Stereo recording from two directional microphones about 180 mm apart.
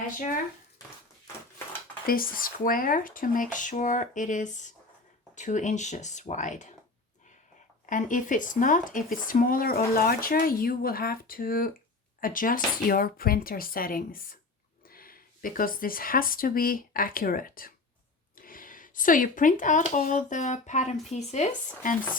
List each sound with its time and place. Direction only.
0.2 s speech: 50° left (ahead or behind)
2.0 s speech: 55° left (ahead or behind)
7.9 s speech: 45° left (ahead or behind)